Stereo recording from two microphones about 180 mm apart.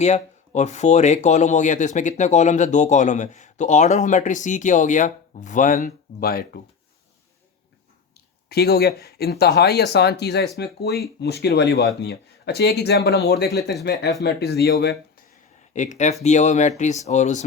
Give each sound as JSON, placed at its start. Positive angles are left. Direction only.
{"t": 0.0, "sound": "speech", "side_deg": 40}
{"t": 8.4, "sound": "speech", "side_deg": 65}
{"t": 15.7, "sound": "speech", "side_deg": 40}